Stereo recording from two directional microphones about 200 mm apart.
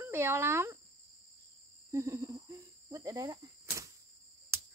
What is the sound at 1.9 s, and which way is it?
Cricket, 15° right (ahead or behind).